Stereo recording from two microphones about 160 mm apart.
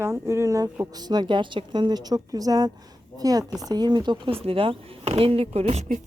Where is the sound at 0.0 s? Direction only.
15° right (ahead or behind).